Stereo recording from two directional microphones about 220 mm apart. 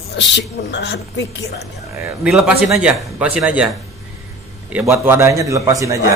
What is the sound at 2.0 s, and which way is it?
A man's voice, 5° right (ahead or behind).